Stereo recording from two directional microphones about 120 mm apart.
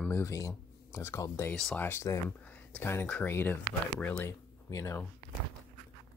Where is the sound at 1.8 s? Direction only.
20° left (ahead or behind).